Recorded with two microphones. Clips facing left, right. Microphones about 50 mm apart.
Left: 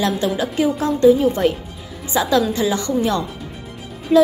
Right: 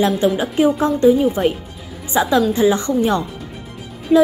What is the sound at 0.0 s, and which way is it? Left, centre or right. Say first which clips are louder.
Speech: right 3 dB; right.